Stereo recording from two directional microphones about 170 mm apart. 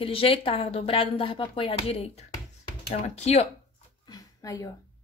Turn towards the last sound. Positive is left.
turn(degrees=20)  # may be behind; listen again after turning